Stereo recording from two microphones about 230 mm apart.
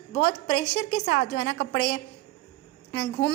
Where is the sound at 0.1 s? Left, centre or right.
Left.